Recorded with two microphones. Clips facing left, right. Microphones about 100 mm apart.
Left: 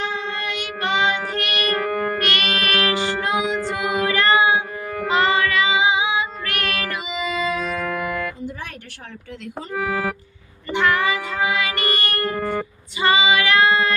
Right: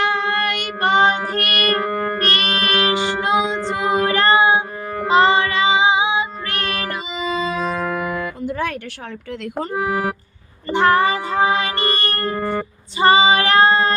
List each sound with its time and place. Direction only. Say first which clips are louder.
0.0 s child singing: right 7 dB; 65° right (ahead or behind)
2.1 s music: right 2 dB; 35° right (ahead or behind)
8.4 s music: right 9 dB; 80° right
9.7 s speech: right 1 dB; 25° right (ahead or behind)
10.7 s music: right 4 dB; 40° right (ahead or behind)